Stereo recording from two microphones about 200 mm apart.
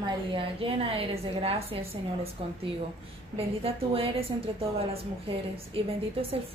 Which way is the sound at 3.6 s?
30° right (ahead or behind).